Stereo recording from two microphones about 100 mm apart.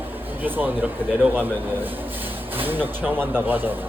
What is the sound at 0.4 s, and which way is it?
Speech, 20° right (ahead or behind).